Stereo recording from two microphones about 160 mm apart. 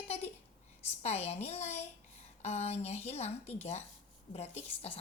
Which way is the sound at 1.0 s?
40° left (ahead or behind).